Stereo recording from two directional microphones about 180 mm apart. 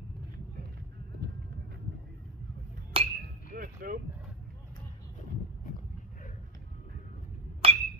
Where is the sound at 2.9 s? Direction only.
30° right (ahead or behind).